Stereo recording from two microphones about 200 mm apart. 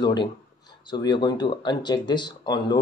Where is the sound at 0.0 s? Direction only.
20° left (ahead or behind).